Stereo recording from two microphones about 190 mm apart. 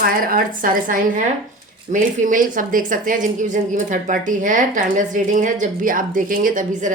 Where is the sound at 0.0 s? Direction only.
50° right (ahead or behind).